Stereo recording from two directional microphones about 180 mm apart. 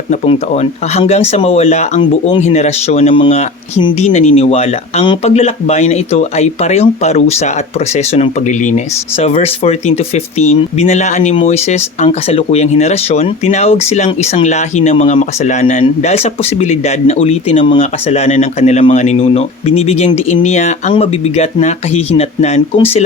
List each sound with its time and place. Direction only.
0.1 s speech: 35° left (ahead or behind)
2.0 s speech: 25° left (ahead or behind)
2.4 s speech: 40° left (ahead or behind)